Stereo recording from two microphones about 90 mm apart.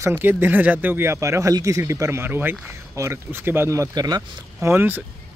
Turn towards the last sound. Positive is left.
turn(degrees=-25)  # may be behind; listen again after turning